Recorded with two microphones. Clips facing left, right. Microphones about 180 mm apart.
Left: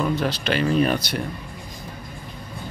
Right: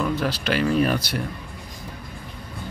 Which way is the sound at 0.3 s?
10° right (ahead or behind).